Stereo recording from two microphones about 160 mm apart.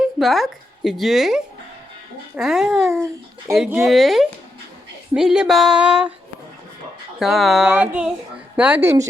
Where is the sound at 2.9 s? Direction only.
15° right (ahead or behind).